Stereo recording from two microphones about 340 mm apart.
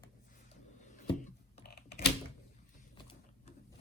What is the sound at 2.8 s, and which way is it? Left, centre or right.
Printer, centre.